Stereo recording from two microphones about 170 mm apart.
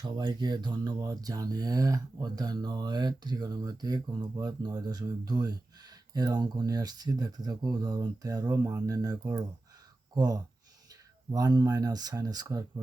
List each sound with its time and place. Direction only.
0.0 s speech: 25° right (ahead or behind)